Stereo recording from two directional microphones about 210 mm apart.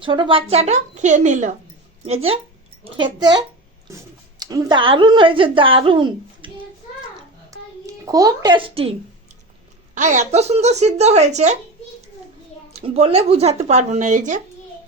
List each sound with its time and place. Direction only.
0.0 s a child's voice: 25° right (ahead or behind)
7.5 s a sound: 15° right (ahead or behind)
7.9 s a child's voice: 15° right (ahead or behind); by 11.5 s 35° right (ahead or behind)
12.7 s speech: 30° right (ahead or behind)